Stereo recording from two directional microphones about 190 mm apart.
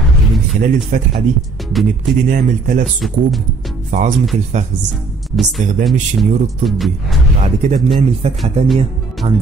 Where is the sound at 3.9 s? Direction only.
40° right (ahead or behind).